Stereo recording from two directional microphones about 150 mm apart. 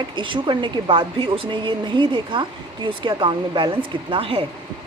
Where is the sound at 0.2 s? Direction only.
35° right (ahead or behind).